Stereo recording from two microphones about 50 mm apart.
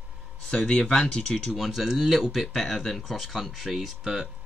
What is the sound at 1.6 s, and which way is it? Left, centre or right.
Speech, centre.